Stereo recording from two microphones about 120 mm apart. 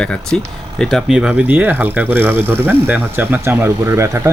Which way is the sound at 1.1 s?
10° right (ahead or behind).